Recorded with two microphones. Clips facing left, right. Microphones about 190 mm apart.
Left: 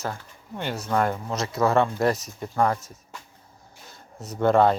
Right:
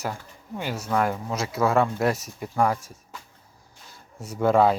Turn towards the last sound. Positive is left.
turn(degrees=-5)  # may be behind; listen again after turning